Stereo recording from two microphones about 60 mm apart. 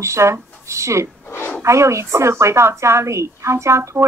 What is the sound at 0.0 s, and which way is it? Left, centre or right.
A woman's voice, right.